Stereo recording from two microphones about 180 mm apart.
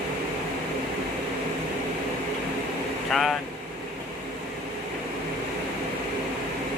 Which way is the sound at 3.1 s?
Centre (ahead or behind).